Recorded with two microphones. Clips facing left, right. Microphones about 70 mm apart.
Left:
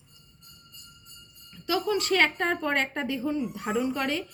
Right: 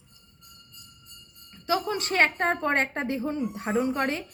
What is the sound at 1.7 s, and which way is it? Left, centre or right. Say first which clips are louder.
A woman's voice: left 1 dB; right.